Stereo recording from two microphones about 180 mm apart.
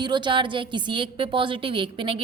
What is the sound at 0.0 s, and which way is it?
A woman's voice, 25° right (ahead or behind).